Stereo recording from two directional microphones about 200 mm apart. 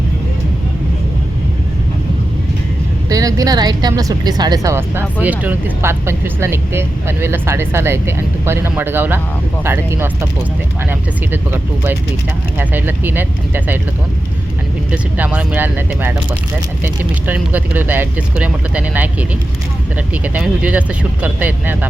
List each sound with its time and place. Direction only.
3.1 s a woman's voice: 15° right (ahead or behind)
11.3 s a woman's voice: 10° right (ahead or behind)
15.2 s a woman's voice: 5° right (ahead or behind)
20.2 s a woman's voice: 5° right (ahead or behind)